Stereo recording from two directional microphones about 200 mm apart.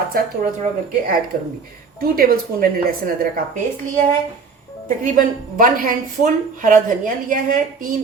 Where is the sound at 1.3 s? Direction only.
45° right (ahead or behind).